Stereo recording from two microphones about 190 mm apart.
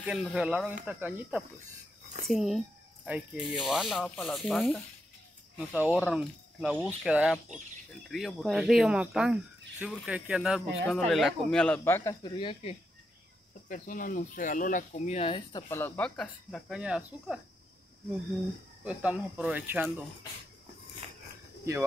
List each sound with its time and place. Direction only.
0.0 s speech: 5° right (ahead or behind); by 12.7 s 25° left (ahead or behind)
13.7 s speech: 45° left (ahead or behind); by 15.6 s 30° left (ahead or behind)
15.7 s speech: 10° left (ahead or behind)
18.9 s speech: 5° right (ahead or behind)